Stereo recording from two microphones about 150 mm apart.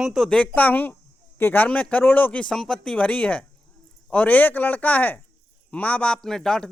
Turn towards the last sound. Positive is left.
turn(degrees=5)  # may be behind; listen again after turning